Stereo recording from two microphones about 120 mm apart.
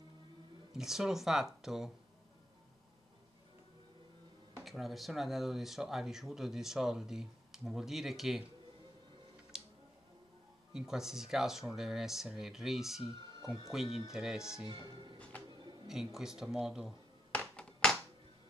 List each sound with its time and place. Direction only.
0.7 s speech: 5° right (ahead or behind)
4.6 s speech: centre (ahead or behind)
9.5 s music: 5° right (ahead or behind)
10.7 s speech: 5° right (ahead or behind)
13.0 s speech: 40° right (ahead or behind)
14.1 s speech: 5° right (ahead or behind)
14.7 s speech: 40° right (ahead or behind)
15.9 s speech: 5° right (ahead or behind)
17.3 s music: 5° left (ahead or behind)